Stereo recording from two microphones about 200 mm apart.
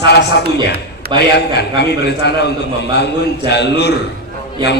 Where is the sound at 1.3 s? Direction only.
55° left (ahead or behind).